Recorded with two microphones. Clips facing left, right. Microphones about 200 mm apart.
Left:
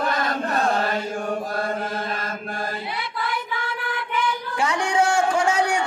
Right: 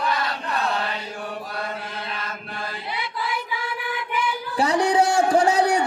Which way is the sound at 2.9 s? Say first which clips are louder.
Even; centre (ahead or behind).